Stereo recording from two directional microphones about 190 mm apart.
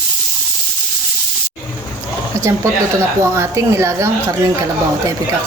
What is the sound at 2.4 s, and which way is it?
A woman's voice, 15° right (ahead or behind).